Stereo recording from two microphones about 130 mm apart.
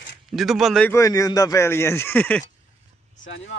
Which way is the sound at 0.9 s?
25° left (ahead or behind).